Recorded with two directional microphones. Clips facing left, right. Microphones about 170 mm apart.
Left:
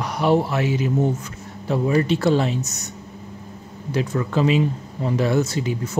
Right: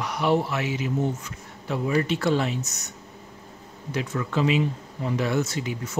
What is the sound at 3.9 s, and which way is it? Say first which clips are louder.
A man's voice: left 5 dB; 35° left (ahead or behind).